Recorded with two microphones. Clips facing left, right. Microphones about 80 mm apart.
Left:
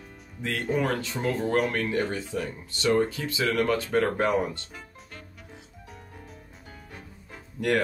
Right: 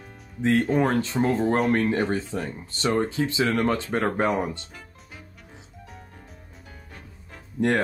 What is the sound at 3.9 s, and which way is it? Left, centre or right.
Speech, right.